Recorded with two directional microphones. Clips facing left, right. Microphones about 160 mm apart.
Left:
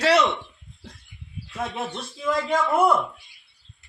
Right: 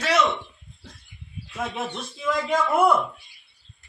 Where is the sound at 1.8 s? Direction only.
Centre (ahead or behind).